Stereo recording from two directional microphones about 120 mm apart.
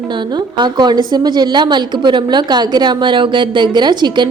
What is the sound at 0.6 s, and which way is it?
A woman's voice, 40° right (ahead or behind).